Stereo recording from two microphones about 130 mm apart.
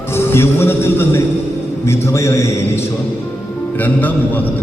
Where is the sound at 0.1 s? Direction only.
20° left (ahead or behind).